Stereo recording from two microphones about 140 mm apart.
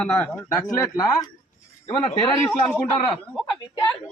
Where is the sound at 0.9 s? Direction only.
25° left (ahead or behind).